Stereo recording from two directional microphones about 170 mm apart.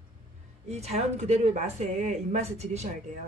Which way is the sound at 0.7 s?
40° right (ahead or behind).